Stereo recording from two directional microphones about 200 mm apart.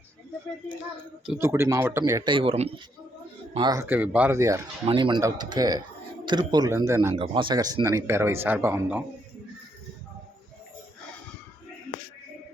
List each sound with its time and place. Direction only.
1.4 s speech: 15° right (ahead or behind)